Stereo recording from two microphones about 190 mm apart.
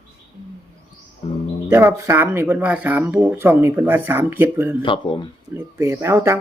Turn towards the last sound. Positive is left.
turn(degrees=-15)  # may be behind; listen again after turning